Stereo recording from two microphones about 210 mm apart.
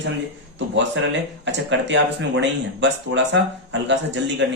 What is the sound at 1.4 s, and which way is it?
Speech, 60° right (ahead or behind).